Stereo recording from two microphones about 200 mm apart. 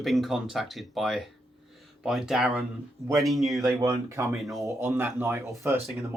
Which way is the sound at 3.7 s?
15° right (ahead or behind).